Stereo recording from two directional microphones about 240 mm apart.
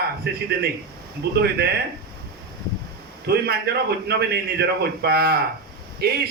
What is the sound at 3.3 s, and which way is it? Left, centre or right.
A man's voice, right.